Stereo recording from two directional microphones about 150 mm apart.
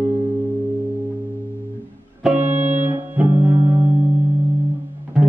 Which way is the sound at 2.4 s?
55° right (ahead or behind).